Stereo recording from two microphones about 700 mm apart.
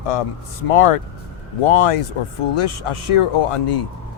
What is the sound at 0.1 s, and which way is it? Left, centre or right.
A man's voice, left.